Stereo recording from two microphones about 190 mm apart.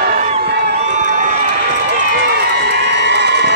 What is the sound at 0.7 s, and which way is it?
Crowd, 35° right (ahead or behind).